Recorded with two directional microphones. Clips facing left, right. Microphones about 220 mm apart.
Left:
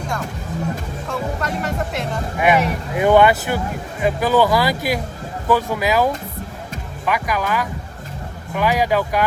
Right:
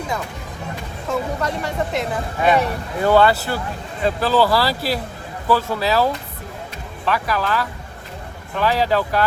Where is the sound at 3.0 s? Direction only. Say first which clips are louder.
Left 2 dB; 15° left (ahead or behind).